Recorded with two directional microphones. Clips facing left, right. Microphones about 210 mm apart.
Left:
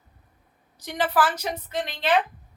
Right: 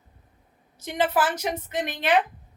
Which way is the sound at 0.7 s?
20° right (ahead or behind).